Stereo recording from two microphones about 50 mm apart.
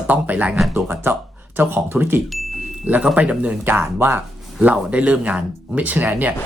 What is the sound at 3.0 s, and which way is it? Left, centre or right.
Speech, right.